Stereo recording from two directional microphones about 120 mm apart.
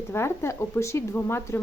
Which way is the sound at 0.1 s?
20° left (ahead or behind).